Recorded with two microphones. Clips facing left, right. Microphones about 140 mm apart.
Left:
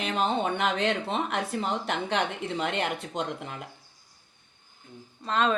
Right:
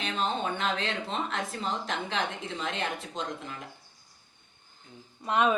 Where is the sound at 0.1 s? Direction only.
75° left (ahead or behind).